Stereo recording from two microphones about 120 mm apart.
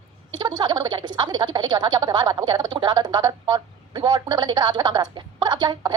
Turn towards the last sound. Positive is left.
turn(degrees=-35)  # may be behind; listen again after turning